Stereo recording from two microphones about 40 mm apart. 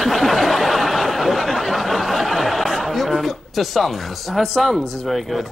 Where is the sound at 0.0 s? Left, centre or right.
Centre.